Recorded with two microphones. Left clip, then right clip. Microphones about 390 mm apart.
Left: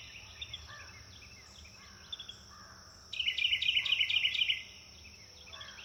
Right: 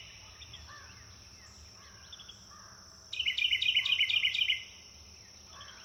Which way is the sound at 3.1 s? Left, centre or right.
Right.